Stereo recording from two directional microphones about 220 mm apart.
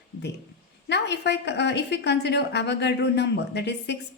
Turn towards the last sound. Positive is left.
turn(degrees=50)  # may be behind; listen again after turning